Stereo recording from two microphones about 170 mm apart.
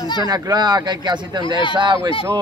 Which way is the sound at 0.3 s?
25° right (ahead or behind).